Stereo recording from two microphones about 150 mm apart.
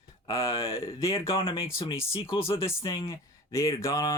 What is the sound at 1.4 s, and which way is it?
Speech, 35° left (ahead or behind).